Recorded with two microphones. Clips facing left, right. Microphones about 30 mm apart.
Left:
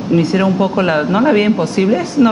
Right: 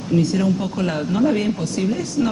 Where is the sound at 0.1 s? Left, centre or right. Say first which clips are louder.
Left 5 dB; left.